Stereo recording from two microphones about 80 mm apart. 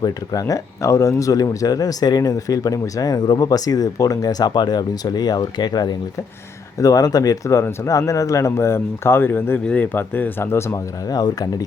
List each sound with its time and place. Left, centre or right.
0.0 s speech: left
11.1 s speech: left